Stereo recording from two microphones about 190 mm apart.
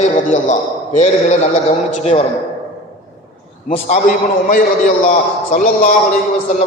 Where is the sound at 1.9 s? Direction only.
35° left (ahead or behind).